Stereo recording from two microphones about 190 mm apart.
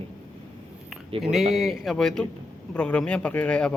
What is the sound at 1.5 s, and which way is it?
Speech, centre (ahead or behind).